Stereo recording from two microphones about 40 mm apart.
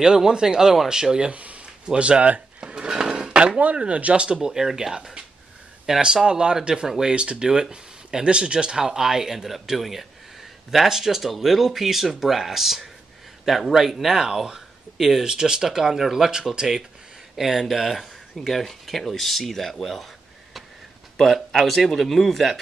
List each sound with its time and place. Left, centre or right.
0.0 s speech: centre
1.3 s speech: right
2.6 s speech: right
4.4 s speech: centre
8.8 s speech: centre
15.2 s speech: centre
21.2 s speech: centre